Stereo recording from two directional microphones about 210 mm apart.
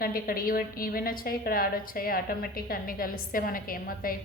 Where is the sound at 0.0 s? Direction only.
45° left (ahead or behind).